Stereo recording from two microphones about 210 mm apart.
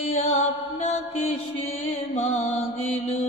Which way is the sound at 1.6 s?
30° left (ahead or behind).